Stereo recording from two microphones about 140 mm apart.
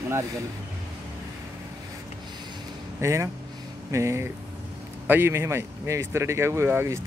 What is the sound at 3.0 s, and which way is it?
Speech, 20° right (ahead or behind).